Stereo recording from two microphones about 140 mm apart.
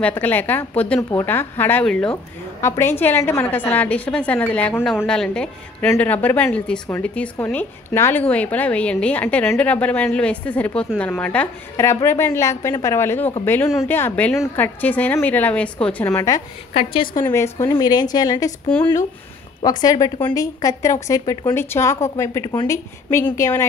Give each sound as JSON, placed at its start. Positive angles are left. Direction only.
{"t": 0.0, "sound": "a woman's voice", "side_deg": 15}
{"t": 16.1, "sound": "speech", "side_deg": 25}
{"t": 16.7, "sound": "a woman's voice", "side_deg": 40}
{"t": 17.1, "sound": "speech", "side_deg": 20}
{"t": 19.6, "sound": "speech", "side_deg": 30}